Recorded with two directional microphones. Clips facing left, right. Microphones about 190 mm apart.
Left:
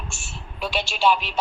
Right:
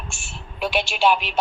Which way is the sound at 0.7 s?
55° right (ahead or behind).